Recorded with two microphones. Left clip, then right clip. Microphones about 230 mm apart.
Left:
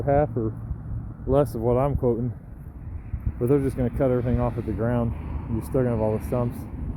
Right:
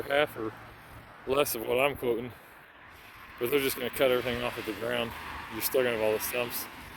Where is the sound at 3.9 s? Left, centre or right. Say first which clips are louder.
Left 2 dB; right.